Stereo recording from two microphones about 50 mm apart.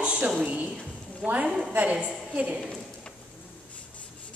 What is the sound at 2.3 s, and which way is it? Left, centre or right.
Speech, right.